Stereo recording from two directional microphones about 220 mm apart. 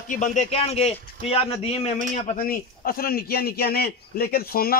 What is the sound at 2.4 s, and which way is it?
A man's voice, 40° left (ahead or behind).